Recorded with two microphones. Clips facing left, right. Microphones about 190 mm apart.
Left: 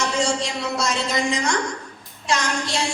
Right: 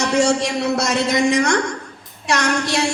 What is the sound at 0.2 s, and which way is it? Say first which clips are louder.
Speech: right 6 dB; 65° right (ahead or behind).